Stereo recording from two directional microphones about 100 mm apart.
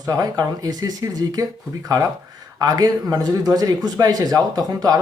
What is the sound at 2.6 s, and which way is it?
Speech, 40° right (ahead or behind).